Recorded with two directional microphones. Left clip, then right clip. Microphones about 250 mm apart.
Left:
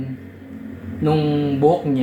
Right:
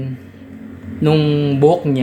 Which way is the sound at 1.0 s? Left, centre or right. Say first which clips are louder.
Right 4 dB; right.